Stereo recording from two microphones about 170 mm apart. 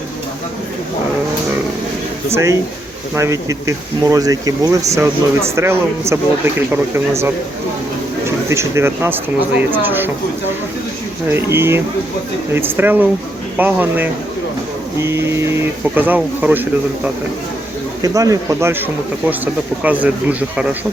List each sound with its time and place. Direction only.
2.3 s speech: 15° right (ahead or behind)
8.4 s speech: 15° right (ahead or behind)
11.3 s speech: 15° right (ahead or behind)
18.0 s speech: 20° right (ahead or behind)